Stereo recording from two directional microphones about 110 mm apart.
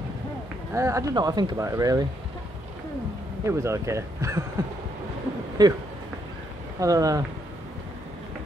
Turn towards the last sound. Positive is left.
turn(degrees=-30)  # may be behind; listen again after turning